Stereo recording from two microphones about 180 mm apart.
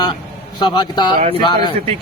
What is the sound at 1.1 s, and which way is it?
Speech, 35° right (ahead or behind).